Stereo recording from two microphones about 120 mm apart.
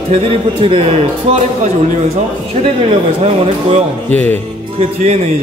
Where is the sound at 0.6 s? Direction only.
45° right (ahead or behind).